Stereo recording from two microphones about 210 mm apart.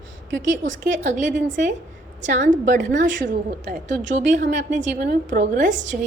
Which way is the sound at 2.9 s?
40° right (ahead or behind).